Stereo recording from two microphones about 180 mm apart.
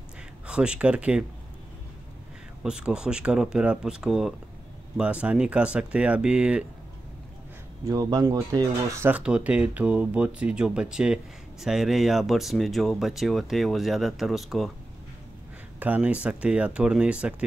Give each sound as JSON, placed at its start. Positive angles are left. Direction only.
{"t": 0.5, "sound": "speech", "side_deg": -5}
{"t": 2.6, "sound": "speech", "side_deg": -5}
{"t": 7.8, "sound": "speech", "side_deg": -20}
{"t": 15.8, "sound": "speech", "side_deg": -10}